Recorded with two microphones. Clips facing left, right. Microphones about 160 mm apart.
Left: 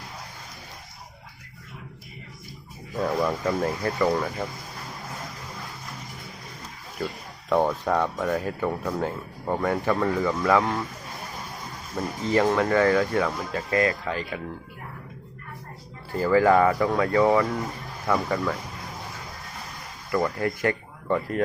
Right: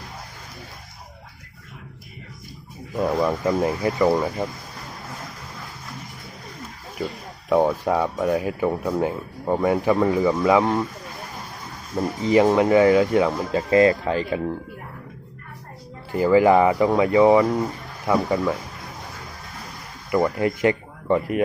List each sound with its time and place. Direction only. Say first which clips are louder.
2.9 s speech: right 3 dB; 10° right (ahead or behind)
7.5 s speech: right 3 dB; 10° right (ahead or behind)
11.9 s speech: right 5 dB; 15° right (ahead or behind)
16.1 s speech: right 3 dB; 15° right (ahead or behind)
20.1 s speech: right 4 dB; 20° right (ahead or behind)